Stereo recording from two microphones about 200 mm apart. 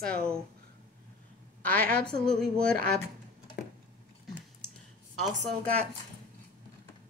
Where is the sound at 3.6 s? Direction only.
50° left (ahead or behind).